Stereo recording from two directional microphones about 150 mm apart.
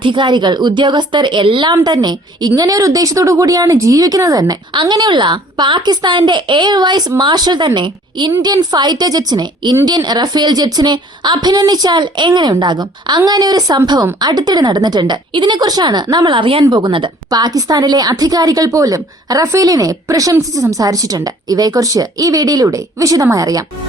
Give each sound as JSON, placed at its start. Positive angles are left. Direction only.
{"t": 0.0, "sound": "a woman's voice", "side_deg": -35}